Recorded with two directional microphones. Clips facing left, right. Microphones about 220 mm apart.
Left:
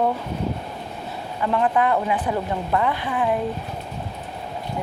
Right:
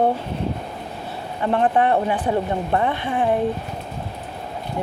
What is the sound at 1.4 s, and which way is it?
Speech, 30° right (ahead or behind).